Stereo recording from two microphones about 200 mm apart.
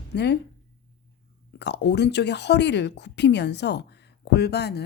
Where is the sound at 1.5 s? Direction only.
60° left (ahead or behind).